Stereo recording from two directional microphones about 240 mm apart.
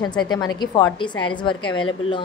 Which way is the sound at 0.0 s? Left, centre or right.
Centre.